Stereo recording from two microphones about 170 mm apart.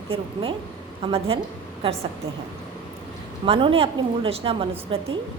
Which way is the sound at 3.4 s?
30° right (ahead or behind).